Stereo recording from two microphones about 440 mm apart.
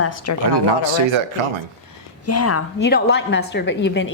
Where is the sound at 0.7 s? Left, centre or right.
Right.